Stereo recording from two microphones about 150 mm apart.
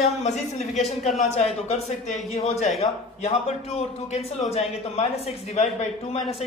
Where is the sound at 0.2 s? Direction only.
50° left (ahead or behind).